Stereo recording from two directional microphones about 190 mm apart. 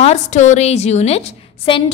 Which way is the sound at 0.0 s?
35° left (ahead or behind).